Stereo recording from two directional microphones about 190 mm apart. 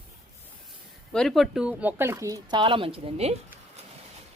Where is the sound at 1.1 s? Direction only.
Centre (ahead or behind); by 3.3 s 30° right (ahead or behind).